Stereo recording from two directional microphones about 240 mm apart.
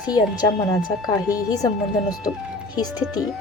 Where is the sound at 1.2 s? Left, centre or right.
Centre.